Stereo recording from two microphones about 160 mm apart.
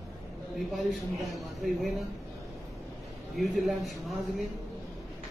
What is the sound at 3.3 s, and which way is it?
Speech, centre (ahead or behind).